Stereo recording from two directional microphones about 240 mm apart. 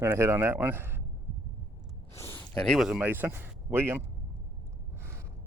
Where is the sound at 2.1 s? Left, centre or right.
Centre.